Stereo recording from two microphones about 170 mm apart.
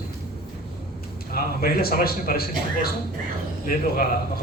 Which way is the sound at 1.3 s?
60° left (ahead or behind).